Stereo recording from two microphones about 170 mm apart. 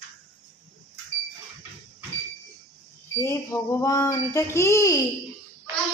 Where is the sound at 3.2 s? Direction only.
15° left (ahead or behind).